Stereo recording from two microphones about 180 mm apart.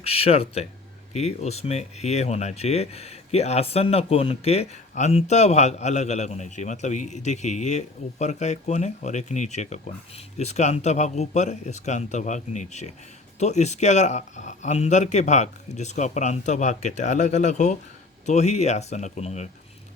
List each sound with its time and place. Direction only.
0.0 s speech: 35° left (ahead or behind)